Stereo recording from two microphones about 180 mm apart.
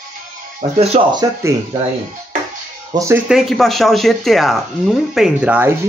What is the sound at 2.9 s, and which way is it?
Speech, 15° right (ahead or behind).